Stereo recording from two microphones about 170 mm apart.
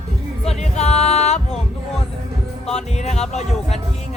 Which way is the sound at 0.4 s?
40° left (ahead or behind).